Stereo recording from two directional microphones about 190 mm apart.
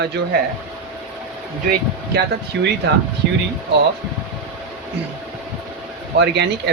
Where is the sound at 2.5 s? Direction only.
70° right (ahead or behind).